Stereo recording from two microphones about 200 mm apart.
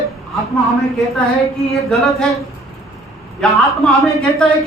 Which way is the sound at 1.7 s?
Centre (ahead or behind).